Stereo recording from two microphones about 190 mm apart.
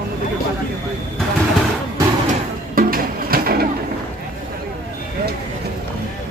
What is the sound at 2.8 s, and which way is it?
Music, 50° right (ahead or behind).